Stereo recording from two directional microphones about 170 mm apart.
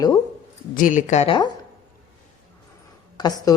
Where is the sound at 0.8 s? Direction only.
50° left (ahead or behind).